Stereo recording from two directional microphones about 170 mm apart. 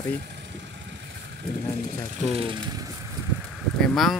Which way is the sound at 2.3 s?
30° right (ahead or behind).